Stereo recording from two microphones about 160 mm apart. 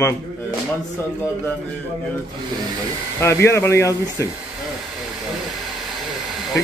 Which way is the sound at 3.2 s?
15° left (ahead or behind).